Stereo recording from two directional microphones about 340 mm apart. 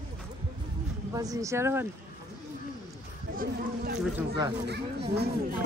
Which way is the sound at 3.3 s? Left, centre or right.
Right.